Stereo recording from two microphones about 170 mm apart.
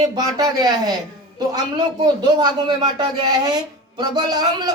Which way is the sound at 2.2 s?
25° right (ahead or behind).